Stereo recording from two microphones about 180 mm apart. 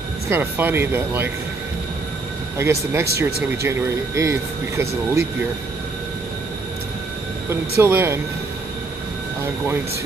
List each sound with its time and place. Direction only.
0.3 s speech: 10° right (ahead or behind)
2.5 s speech: 15° right (ahead or behind)
7.4 s speech: 15° right (ahead or behind)